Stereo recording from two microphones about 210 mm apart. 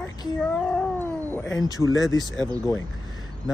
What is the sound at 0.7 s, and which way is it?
Cat, 5° left (ahead or behind).